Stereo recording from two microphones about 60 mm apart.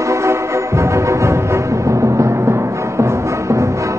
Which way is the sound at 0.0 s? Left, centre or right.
Right.